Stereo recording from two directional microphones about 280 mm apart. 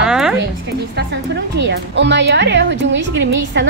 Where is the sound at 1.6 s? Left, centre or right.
Right.